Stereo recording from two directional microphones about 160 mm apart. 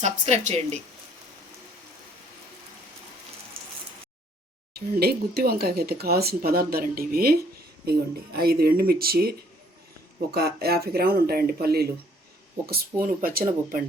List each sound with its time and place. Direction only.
0.0 s speech: 45° right (ahead or behind)
4.7 s speech: 80° right
10.3 s speech: 80° right
13.2 s speech: 65° right (ahead or behind)